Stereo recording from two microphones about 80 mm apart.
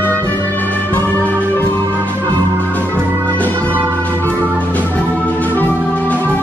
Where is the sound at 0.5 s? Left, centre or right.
Left.